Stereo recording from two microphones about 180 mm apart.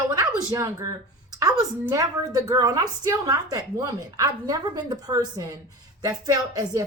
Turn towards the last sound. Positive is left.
turn(degrees=-20)  # may be behind; listen again after turning